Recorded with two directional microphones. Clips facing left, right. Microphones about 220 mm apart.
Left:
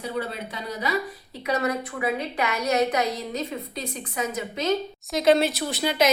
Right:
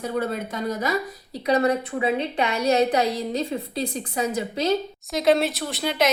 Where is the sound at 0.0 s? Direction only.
50° right (ahead or behind).